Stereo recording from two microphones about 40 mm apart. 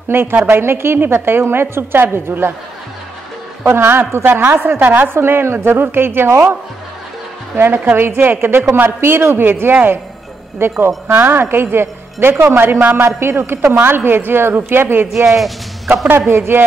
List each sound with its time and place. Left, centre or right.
0.1 s a man's voice: right
0.5 s speech: right
0.9 s a man's voice: right
2.1 s a man's voice: right
3.6 s a man's voice: right
4.2 s a woman's voice: right
7.5 s speech: right
8.0 s a man's voice: right
10.6 s speech: right
11.1 s a man's voice: right
11.5 s a man's voice: right
13.0 s a man's voice: right
15.2 s speech: centre
16.1 s a man's voice: right